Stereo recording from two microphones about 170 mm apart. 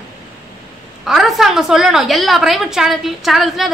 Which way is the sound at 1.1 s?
Centre (ahead or behind).